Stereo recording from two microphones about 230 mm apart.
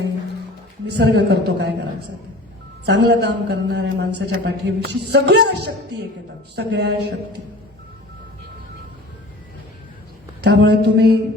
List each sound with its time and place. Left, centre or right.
0.9 s a man's voice: right
2.8 s a man's voice: right
10.4 s a man's voice: right